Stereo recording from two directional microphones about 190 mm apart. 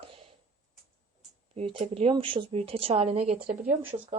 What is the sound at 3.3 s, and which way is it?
Speech, 50° right (ahead or behind).